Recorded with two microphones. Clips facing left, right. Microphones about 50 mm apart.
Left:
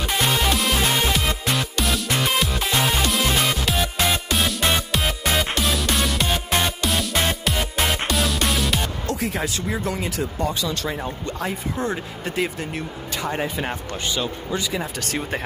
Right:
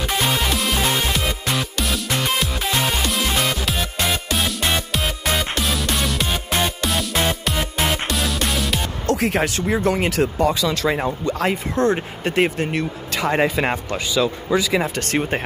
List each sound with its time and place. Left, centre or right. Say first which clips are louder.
0.1 s music: left 1 dB; centre
9.0 s speech: right 6 dB; right
11.9 s speech: right 6 dB; right
13.1 s speech: right 7 dB; right
14.8 s speech: right 6 dB; right